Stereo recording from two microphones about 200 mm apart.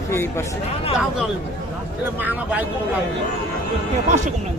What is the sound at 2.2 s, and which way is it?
Speech, 10° right (ahead or behind).